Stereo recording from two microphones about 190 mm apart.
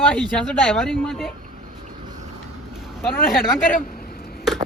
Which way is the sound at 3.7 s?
50° left (ahead or behind).